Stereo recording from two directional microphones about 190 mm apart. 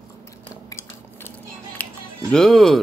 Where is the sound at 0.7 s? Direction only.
15° left (ahead or behind).